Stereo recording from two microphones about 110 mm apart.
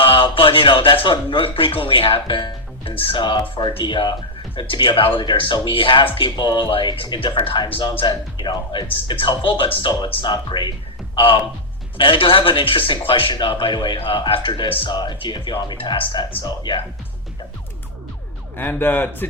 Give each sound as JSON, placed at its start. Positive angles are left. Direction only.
{"t": 0.0, "sound": "a sound", "side_deg": 55}
{"t": 1.0, "sound": "speech", "side_deg": 50}
{"t": 10.3, "sound": "speech", "side_deg": 40}
{"t": 18.5, "sound": "a man's voice", "side_deg": 20}